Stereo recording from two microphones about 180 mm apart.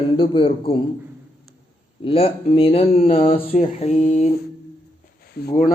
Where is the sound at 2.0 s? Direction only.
30° left (ahead or behind).